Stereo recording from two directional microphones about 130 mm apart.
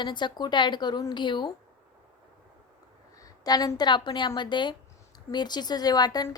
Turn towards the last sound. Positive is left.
turn(degrees=30)  # may be behind; listen again after turning